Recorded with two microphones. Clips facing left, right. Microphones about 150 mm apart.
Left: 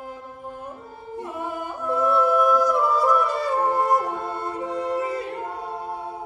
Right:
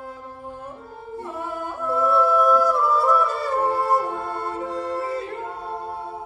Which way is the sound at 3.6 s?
20° left (ahead or behind).